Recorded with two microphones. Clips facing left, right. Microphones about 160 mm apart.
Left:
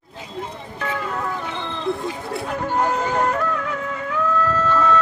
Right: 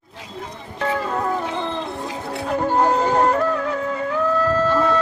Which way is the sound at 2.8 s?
30° right (ahead or behind).